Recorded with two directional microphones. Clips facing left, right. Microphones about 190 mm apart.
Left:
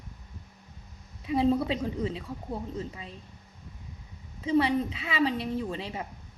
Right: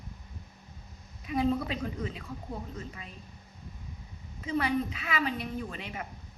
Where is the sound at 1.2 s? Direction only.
30° left (ahead or behind).